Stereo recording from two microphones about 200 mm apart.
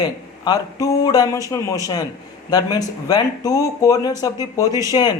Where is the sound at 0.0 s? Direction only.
20° left (ahead or behind).